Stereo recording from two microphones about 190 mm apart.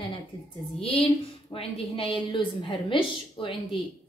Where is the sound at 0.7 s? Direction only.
30° left (ahead or behind).